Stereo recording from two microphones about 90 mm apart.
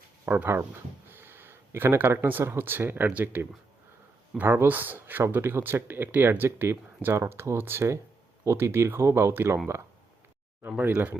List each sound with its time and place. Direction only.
0.3 s speech: 25° right (ahead or behind)
10.8 s speech: 20° right (ahead or behind)